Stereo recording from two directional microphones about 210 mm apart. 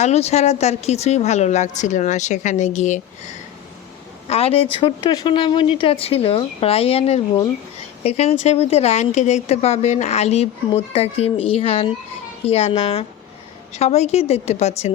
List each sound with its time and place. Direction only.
0.0 s a woman's voice: 30° left (ahead or behind)